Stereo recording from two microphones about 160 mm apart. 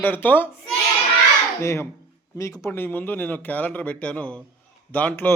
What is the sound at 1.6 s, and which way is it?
Speech, 15° left (ahead or behind).